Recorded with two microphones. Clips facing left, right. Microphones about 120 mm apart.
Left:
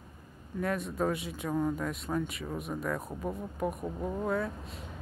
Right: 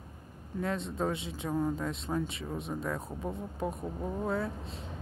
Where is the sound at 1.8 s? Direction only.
25° right (ahead or behind).